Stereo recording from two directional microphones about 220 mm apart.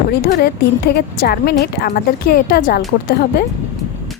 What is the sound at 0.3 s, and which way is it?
A woman's voice, 45° left (ahead or behind).